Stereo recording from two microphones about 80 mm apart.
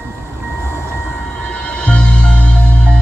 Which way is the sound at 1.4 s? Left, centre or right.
Centre.